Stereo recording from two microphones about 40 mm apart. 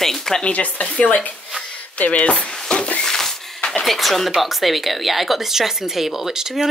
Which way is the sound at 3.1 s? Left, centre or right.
Centre.